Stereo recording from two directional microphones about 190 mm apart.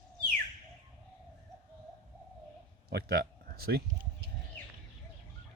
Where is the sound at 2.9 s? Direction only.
55° right (ahead or behind).